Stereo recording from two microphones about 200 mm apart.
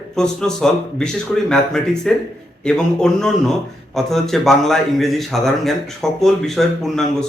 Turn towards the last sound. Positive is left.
turn(degrees=0)  # may be behind; listen again after turning